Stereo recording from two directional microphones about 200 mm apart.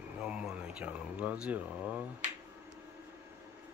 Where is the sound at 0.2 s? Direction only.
5° right (ahead or behind).